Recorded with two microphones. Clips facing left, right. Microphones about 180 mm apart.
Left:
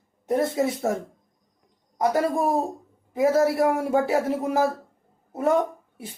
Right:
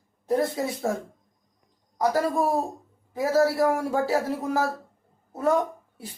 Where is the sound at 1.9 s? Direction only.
20° left (ahead or behind).